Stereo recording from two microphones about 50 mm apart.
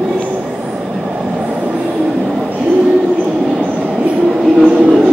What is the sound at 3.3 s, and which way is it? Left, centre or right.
Train, centre.